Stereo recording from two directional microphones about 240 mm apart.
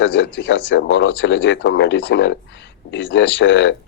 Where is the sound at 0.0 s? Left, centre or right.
Left.